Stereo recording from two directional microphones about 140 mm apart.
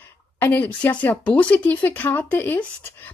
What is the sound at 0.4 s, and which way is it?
Speech, 15° left (ahead or behind).